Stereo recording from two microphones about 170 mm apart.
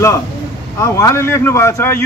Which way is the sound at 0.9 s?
15° left (ahead or behind).